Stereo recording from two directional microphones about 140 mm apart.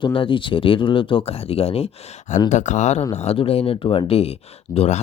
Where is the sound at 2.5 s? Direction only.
60° left (ahead or behind).